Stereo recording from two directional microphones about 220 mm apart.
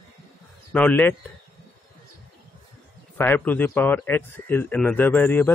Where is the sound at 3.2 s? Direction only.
10° left (ahead or behind).